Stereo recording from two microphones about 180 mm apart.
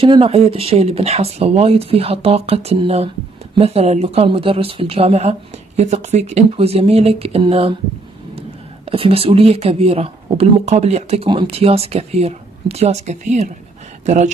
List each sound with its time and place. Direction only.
0.0 s speech: 30° right (ahead or behind)